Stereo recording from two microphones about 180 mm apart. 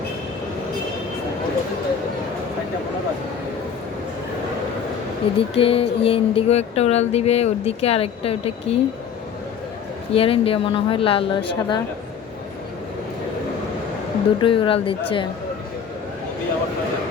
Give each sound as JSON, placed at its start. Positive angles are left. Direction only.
{"t": 5.2, "sound": "a sound", "side_deg": 30}
{"t": 10.1, "sound": "a woman's voice", "side_deg": 30}
{"t": 14.4, "sound": "a woman's voice", "side_deg": 30}